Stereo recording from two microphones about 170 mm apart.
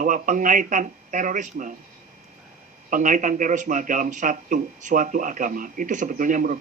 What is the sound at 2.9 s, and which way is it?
A man's voice, 50° right (ahead or behind).